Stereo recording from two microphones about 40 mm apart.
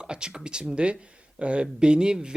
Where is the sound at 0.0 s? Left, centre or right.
Right.